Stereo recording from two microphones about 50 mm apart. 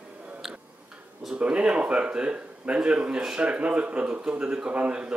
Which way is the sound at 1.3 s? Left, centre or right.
Right.